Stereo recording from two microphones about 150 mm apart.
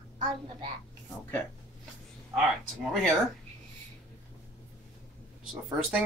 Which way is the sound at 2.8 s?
Centre (ahead or behind).